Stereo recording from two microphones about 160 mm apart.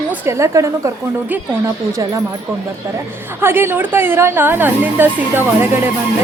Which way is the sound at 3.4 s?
15° right (ahead or behind).